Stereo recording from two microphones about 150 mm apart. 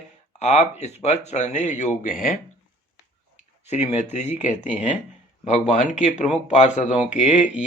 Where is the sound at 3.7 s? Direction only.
45° left (ahead or behind).